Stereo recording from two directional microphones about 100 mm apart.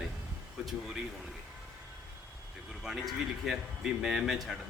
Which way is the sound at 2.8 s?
5° right (ahead or behind).